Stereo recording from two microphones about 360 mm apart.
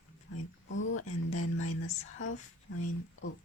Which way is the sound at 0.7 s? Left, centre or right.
Left.